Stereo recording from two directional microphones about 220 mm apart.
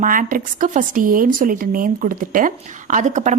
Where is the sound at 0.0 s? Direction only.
40° right (ahead or behind).